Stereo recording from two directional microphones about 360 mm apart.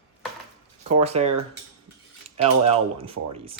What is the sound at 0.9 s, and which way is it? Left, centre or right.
Speech, centre.